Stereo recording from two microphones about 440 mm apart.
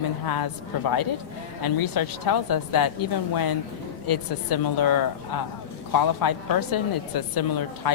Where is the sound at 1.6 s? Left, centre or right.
Left.